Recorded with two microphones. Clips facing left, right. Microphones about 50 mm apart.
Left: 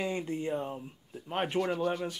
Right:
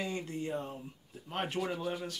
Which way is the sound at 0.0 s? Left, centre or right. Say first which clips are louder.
Left 4 dB; centre.